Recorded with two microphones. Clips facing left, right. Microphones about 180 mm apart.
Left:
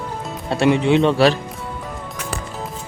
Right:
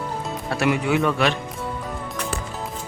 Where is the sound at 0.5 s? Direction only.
25° left (ahead or behind).